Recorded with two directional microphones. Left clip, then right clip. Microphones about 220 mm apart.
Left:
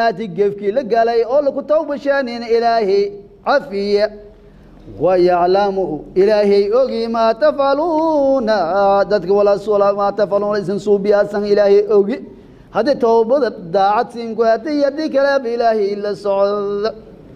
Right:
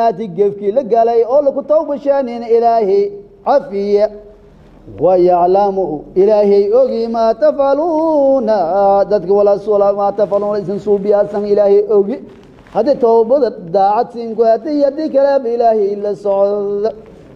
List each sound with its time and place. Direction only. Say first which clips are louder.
0.0 s mantra: right 3 dB; 15° left (ahead or behind)
10.9 s speech: right 1 dB; 25° left (ahead or behind)
11.4 s mantra: right 1 dB; 15° left (ahead or behind)